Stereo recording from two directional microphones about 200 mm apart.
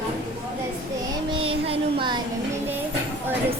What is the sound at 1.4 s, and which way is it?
Child singing, 30° right (ahead or behind).